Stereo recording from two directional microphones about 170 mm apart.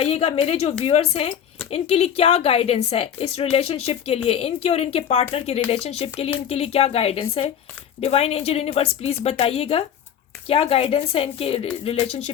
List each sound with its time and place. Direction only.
0.0 s a woman's voice: 35° left (ahead or behind)